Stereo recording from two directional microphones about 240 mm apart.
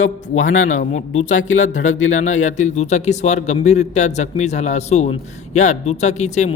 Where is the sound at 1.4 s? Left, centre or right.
Left.